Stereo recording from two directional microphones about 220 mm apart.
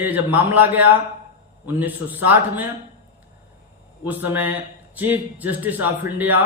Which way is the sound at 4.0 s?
10° right (ahead or behind).